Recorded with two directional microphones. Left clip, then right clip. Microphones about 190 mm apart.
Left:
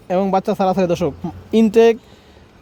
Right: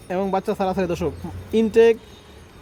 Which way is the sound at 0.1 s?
45° left (ahead or behind).